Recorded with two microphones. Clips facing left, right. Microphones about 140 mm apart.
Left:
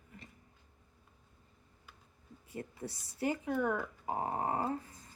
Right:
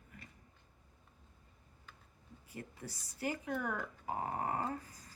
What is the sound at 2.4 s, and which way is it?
Speech, 30° left (ahead or behind).